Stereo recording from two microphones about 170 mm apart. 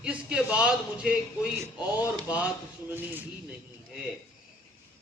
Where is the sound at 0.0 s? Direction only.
5° right (ahead or behind).